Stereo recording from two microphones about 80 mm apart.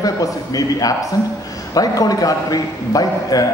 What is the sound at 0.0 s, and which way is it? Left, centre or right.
A man's voice, left.